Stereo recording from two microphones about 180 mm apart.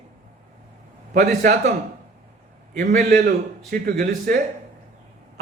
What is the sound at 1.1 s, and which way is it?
Speech, 40° right (ahead or behind).